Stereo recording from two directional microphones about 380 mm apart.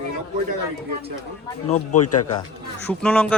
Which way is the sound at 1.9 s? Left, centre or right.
Left.